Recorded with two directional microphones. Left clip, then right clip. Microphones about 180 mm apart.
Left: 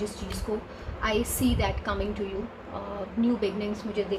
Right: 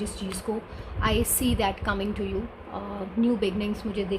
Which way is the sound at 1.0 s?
55° right (ahead or behind).